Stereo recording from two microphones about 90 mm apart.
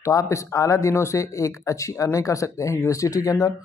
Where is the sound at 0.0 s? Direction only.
35° left (ahead or behind).